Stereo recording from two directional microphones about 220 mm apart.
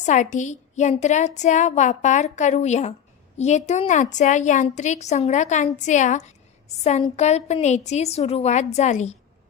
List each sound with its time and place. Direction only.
0.0 s a woman's voice: 35° left (ahead or behind)